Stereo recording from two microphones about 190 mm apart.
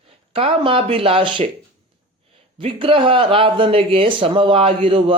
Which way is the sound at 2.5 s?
30° right (ahead or behind).